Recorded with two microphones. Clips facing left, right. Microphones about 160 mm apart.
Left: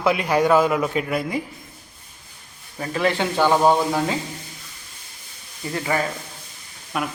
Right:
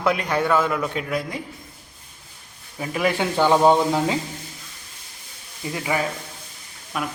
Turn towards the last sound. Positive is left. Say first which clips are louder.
# left 2 dB
turn(degrees=0)  # may be behind; listen again after turning